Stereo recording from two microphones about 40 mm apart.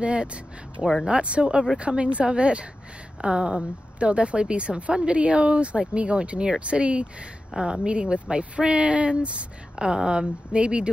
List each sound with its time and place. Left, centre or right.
0.0 s speech: right